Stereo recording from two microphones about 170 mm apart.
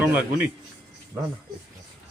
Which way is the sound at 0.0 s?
10° right (ahead or behind).